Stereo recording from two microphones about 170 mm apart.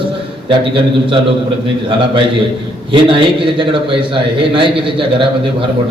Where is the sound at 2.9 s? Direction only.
30° right (ahead or behind).